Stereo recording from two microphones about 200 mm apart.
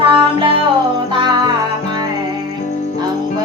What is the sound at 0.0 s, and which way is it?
Music, 25° right (ahead or behind).